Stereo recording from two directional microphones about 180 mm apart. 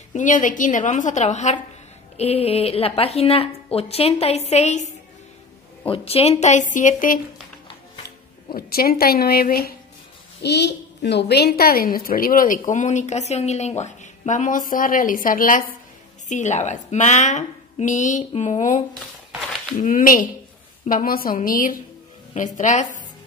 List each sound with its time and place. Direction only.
0.1 s a woman's voice: 45° left (ahead or behind)
5.9 s a woman's voice: 35° left (ahead or behind)
8.5 s a woman's voice: 55° left (ahead or behind)
10.4 s a woman's voice: 70° left (ahead or behind); by 18.8 s 40° left (ahead or behind)
19.8 s a woman's voice: 50° left (ahead or behind)